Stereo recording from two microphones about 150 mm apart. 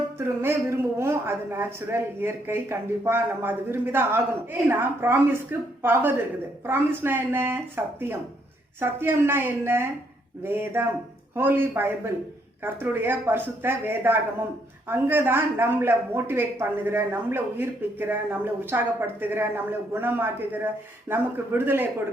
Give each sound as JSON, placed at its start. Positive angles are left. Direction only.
{"t": 0.2, "sound": "a woman's voice", "side_deg": -15}